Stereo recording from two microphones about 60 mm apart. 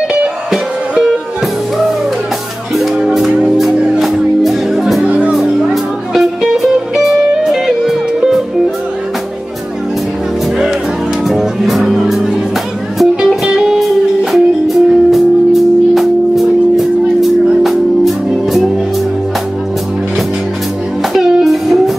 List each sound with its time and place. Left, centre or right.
2.7 s music: centre
5.0 s music: right
5.3 s music: centre
11.2 s music: centre
21.1 s music: centre